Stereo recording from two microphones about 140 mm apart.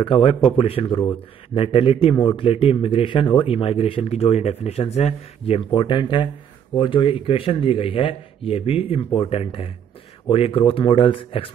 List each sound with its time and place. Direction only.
0.0 s speech: 40° left (ahead or behind)